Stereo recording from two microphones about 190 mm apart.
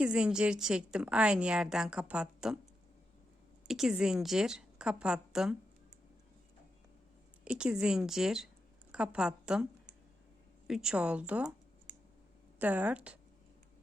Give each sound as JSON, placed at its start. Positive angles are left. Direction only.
{"t": 0.0, "sound": "a woman's voice", "side_deg": -5}
{"t": 3.7, "sound": "a woman's voice", "side_deg": 0}
{"t": 7.4, "sound": "a woman's voice", "side_deg": -5}
{"t": 10.7, "sound": "a woman's voice", "side_deg": -5}
{"t": 12.5, "sound": "a woman's voice", "side_deg": -10}